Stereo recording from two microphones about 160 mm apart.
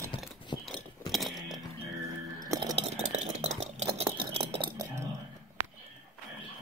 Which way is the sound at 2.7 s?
45° right (ahead or behind).